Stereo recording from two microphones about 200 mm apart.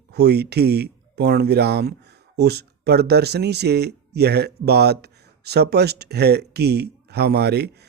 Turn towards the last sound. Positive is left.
turn(degrees=-55)  # may be behind; listen again after turning